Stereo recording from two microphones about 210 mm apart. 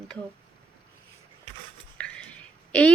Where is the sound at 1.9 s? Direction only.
5° left (ahead or behind).